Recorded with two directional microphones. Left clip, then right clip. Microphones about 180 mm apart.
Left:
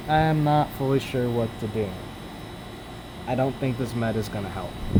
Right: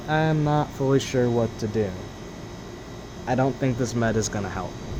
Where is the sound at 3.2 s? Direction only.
20° right (ahead or behind).